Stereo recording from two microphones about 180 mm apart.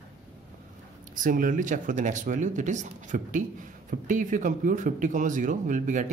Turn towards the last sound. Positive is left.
turn(degrees=-45)  # may be behind; listen again after turning